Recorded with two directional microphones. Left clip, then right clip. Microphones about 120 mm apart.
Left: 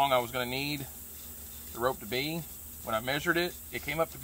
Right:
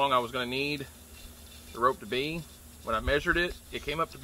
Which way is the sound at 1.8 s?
45° left (ahead or behind).